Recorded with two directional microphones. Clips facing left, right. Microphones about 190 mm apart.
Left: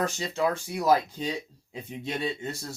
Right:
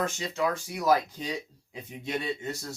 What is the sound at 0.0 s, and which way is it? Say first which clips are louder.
Speech: left 2 dB; 30° left (ahead or behind).